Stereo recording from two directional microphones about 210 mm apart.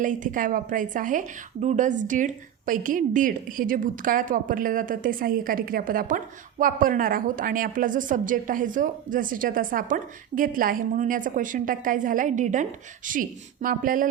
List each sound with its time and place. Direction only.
0.0 s a woman's voice: 40° right (ahead or behind)